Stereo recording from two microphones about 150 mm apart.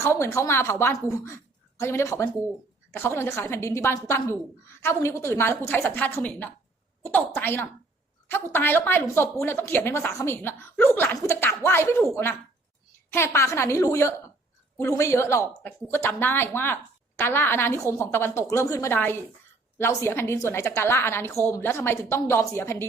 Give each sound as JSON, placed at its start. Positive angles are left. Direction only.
{"t": 0.0, "sound": "a woman's voice", "side_deg": 20}